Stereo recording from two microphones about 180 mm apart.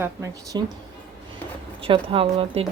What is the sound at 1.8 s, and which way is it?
Speech, 30° right (ahead or behind).